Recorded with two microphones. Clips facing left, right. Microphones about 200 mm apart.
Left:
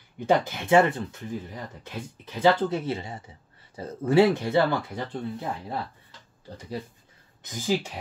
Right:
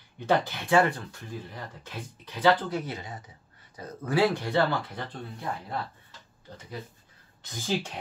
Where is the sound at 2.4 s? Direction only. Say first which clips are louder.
Left 2 dB; 25° left (ahead or behind).